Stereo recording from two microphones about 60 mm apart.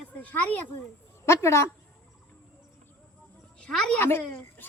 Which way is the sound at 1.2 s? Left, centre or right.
Left.